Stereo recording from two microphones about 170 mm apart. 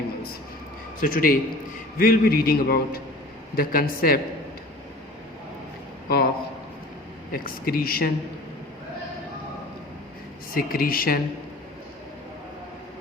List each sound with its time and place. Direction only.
0.9 s a man's voice: 55° left (ahead or behind)
6.1 s a man's voice: 65° left (ahead or behind)
7.3 s a man's voice: 55° left (ahead or behind)
10.5 s a man's voice: 60° left (ahead or behind)